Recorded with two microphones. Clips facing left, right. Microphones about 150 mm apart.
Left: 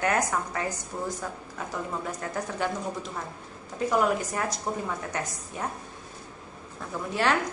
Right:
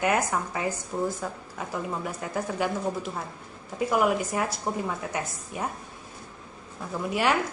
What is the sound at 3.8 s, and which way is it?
A woman's voice, 10° right (ahead or behind).